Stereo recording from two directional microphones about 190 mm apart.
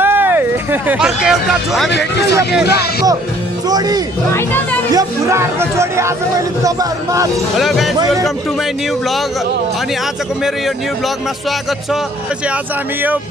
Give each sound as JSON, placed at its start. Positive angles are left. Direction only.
{"t": 0.0, "sound": "speech", "side_deg": -10}
{"t": 1.9, "sound": "speech", "side_deg": 65}
{"t": 3.6, "sound": "speech", "side_deg": -20}
{"t": 7.5, "sound": "speech", "side_deg": 0}